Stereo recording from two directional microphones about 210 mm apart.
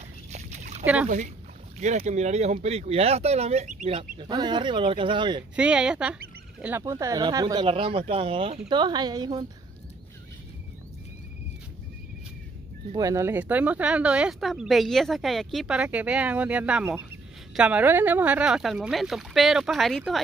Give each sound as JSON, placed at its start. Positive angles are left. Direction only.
{"t": 0.3, "sound": "a sound", "side_deg": -35}
{"t": 1.0, "sound": "speech", "side_deg": -35}
{"t": 4.2, "sound": "speech", "side_deg": -20}
{"t": 5.6, "sound": "speech", "side_deg": -5}
{"t": 12.9, "sound": "speech", "side_deg": -15}